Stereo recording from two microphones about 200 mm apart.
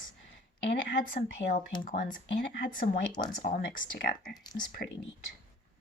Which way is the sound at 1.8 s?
45° left (ahead or behind).